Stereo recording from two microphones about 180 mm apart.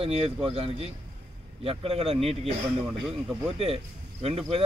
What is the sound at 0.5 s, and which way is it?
Speech, 35° right (ahead or behind).